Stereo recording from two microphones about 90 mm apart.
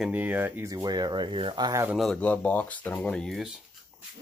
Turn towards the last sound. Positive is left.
turn(degrees=5)  # may be behind; listen again after turning